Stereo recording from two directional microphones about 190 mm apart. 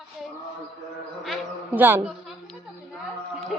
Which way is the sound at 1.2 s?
5° right (ahead or behind).